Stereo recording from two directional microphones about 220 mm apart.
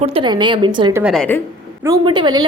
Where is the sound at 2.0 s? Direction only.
20° right (ahead or behind).